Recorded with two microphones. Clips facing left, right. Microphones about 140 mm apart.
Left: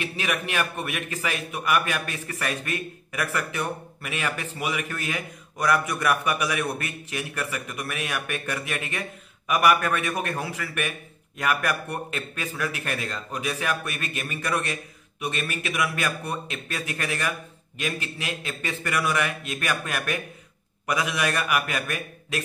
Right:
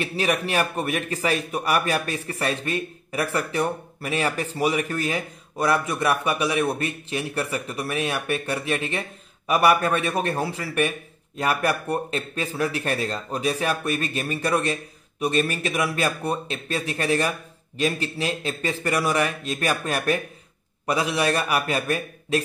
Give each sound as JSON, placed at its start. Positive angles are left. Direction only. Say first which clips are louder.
{"t": 0.0, "sound": "a man's voice", "louder": "right 5 dB", "side_deg": -35}